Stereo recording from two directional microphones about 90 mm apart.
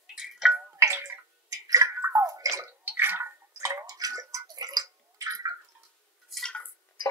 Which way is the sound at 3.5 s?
35° right (ahead or behind).